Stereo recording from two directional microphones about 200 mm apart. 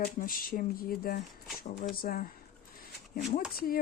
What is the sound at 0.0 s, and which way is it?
Speech, 45° left (ahead or behind).